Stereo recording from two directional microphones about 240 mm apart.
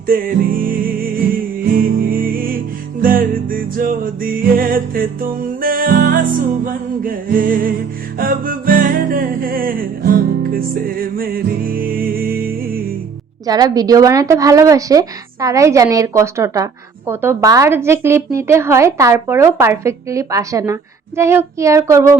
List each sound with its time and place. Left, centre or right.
0.1 s music: right
13.5 s a woman's voice: centre